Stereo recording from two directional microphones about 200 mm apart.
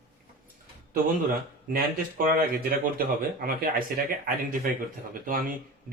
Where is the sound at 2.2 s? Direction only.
45° right (ahead or behind).